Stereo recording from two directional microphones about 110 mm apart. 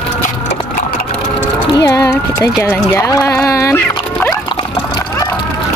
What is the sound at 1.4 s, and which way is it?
Speech, 25° left (ahead or behind).